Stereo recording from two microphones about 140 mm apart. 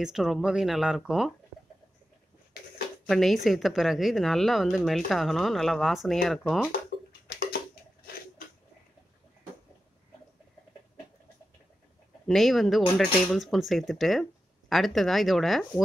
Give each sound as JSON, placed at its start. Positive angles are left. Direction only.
{"t": 0.0, "sound": "a woman's voice", "side_deg": 0}
{"t": 3.1, "sound": "a woman's voice", "side_deg": 0}
{"t": 6.7, "sound": "a sound", "side_deg": 90}
{"t": 12.3, "sound": "a woman's voice", "side_deg": 0}